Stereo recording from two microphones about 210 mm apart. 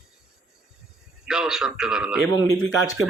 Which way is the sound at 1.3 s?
Centre (ahead or behind).